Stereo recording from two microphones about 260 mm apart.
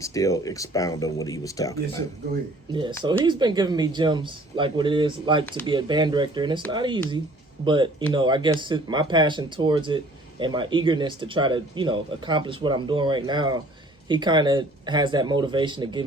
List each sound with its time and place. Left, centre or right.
0.0 s speech: centre
3.0 s speech: centre